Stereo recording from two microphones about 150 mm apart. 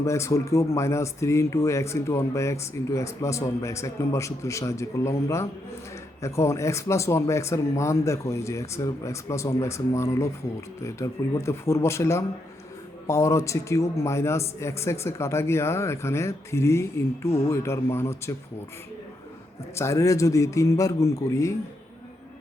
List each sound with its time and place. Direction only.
0.0 s a man's voice: 20° left (ahead or behind)
19.7 s speech: 20° left (ahead or behind)